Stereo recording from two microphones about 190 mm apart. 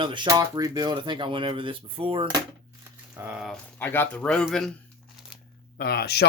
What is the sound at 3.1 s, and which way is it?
Speech, 10° right (ahead or behind).